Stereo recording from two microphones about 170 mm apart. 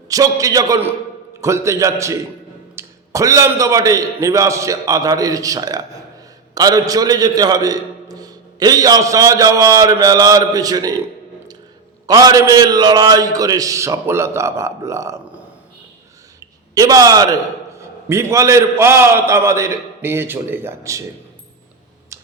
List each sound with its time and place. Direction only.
0.1 s a man's voice: 20° right (ahead or behind)
12.0 s a man's voice: 20° right (ahead or behind)
16.7 s a man's voice: 20° right (ahead or behind)